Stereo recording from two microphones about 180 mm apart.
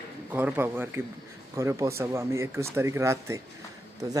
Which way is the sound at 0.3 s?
10° right (ahead or behind).